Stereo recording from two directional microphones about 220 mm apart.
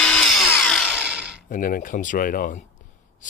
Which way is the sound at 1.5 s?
40° left (ahead or behind).